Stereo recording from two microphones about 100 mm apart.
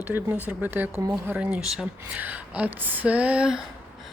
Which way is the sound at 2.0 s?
15° right (ahead or behind).